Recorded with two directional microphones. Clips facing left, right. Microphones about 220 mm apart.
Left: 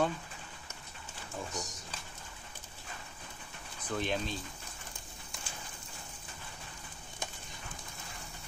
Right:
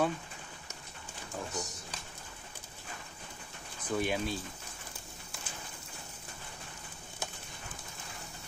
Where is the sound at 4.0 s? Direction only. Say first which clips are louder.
Right 2 dB; 10° right (ahead or behind).